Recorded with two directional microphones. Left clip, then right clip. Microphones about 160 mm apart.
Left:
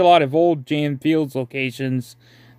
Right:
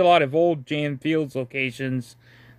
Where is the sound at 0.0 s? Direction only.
35° left (ahead or behind).